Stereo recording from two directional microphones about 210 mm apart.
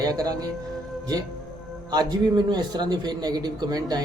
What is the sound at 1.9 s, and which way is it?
A man's voice, 20° right (ahead or behind).